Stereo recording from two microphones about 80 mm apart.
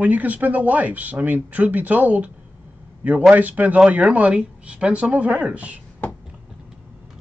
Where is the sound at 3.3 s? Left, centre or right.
Centre.